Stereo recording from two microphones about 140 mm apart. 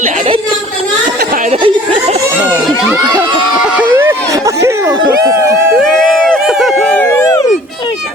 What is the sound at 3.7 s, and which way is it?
Speech, 10° right (ahead or behind).